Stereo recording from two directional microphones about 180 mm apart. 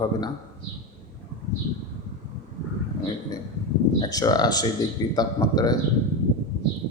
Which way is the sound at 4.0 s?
20° left (ahead or behind).